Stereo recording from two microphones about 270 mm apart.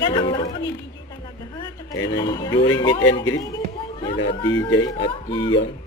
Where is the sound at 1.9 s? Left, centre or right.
Left.